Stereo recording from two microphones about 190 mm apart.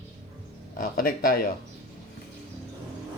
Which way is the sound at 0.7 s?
50° left (ahead or behind).